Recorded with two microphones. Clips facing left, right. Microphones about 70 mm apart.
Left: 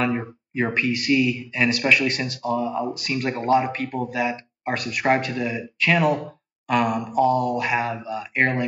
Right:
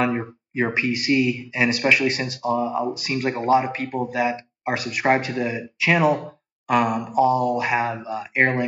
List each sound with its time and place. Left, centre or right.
0.0 s speech: centre